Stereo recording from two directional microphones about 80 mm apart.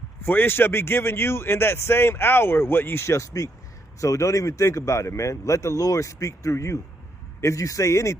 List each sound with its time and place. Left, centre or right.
0.2 s a man's voice: left